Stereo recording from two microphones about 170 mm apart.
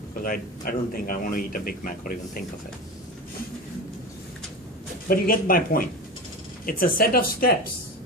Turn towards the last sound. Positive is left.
turn(degrees=60)  # may be behind; listen again after turning